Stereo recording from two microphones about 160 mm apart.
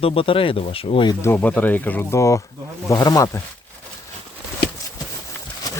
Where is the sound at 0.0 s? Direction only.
35° left (ahead or behind).